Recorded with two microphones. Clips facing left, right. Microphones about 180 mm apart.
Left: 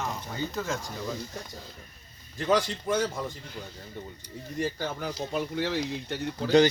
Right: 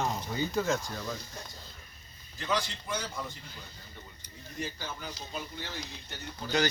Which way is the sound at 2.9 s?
35° left (ahead or behind).